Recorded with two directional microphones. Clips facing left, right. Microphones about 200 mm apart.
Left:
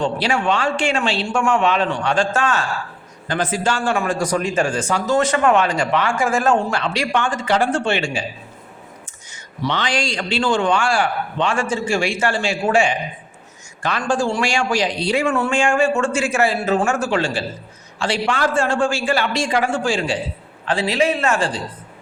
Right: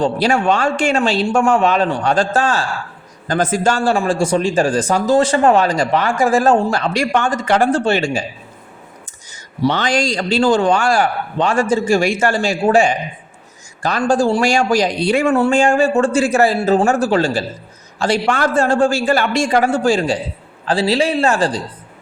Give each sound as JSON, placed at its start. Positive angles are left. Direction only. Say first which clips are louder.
{"t": 0.0, "sound": "a man's voice", "louder": "right 4 dB", "side_deg": -45}
{"t": 3.2, "sound": "a man's voice", "louder": "right 5 dB", "side_deg": -45}
{"t": 9.3, "sound": "a man's voice", "louder": "right 6 dB", "side_deg": -40}